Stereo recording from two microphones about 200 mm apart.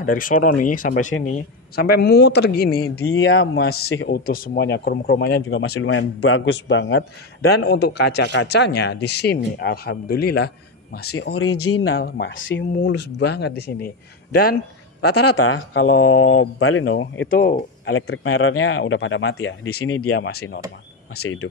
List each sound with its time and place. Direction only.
0.0 s speech: 45° left (ahead or behind)
3.2 s speech: 85° left
3.5 s speech: 50° left (ahead or behind)
5.5 s a man's voice: 90° left; by 11.1 s 55° left (ahead or behind)
11.7 s a man's voice: 75° left (ahead or behind)
12.0 s speech: 50° left (ahead or behind)
12.4 s speech: 65° left (ahead or behind); by 14.6 s 50° left (ahead or behind)
15.4 s speech: 90° left
17.3 s speech: 45° left (ahead or behind)
17.8 s speech: 80° left